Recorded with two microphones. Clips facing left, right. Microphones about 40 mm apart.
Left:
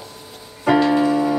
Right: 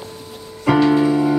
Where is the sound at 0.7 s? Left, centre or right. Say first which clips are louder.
Right 1 dB; centre.